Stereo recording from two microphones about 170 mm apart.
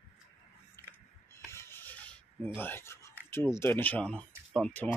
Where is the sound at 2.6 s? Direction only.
15° left (ahead or behind).